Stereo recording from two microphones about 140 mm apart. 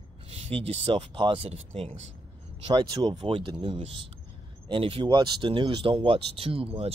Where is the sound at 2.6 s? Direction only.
30° right (ahead or behind).